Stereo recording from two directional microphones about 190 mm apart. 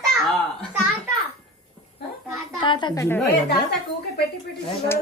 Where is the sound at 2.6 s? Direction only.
25° left (ahead or behind).